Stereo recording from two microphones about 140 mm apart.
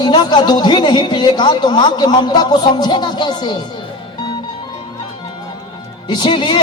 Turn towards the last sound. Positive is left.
turn(degrees=35)  # may be behind; listen again after turning